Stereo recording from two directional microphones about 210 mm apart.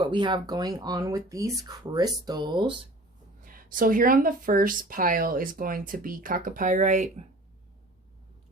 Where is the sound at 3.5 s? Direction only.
40° right (ahead or behind).